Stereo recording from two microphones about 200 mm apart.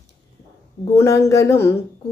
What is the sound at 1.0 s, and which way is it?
Speech, 15° left (ahead or behind).